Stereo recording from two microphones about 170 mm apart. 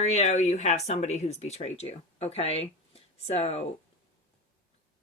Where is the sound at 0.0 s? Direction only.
40° left (ahead or behind).